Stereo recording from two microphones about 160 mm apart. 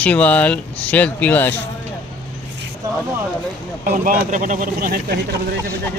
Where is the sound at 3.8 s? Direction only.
70° right (ahead or behind).